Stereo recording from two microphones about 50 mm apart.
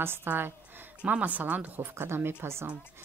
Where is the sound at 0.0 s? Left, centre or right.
Right.